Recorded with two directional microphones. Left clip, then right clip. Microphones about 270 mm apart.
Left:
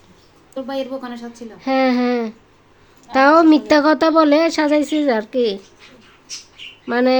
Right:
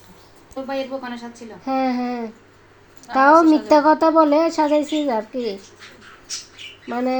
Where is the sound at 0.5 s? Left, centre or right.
Left.